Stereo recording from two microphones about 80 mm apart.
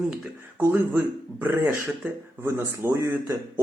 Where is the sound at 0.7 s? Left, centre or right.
Right.